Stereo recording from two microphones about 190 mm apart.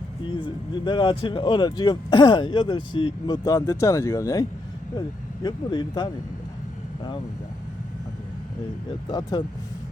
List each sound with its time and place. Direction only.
0.3 s speech: 25° left (ahead or behind)
9.0 s speech: 20° left (ahead or behind)